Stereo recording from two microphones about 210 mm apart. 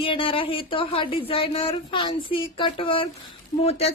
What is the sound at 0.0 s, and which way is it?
A woman's voice, 25° left (ahead or behind).